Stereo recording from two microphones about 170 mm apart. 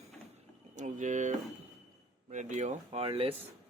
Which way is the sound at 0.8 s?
45° right (ahead or behind).